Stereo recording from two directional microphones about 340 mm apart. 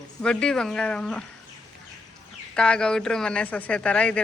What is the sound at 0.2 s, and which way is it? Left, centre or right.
Speech, centre.